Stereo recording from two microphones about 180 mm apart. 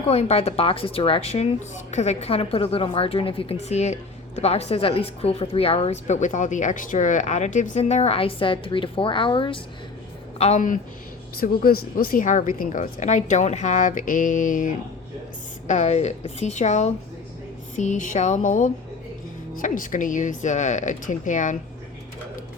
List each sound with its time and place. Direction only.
0.1 s a woman's voice: 35° left (ahead or behind)
11.3 s a woman's voice: 55° left (ahead or behind)